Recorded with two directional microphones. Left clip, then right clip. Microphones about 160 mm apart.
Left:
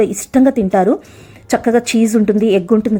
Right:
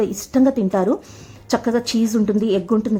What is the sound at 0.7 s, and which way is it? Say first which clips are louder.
A woman's voice: left 6 dB; 20° left (ahead or behind).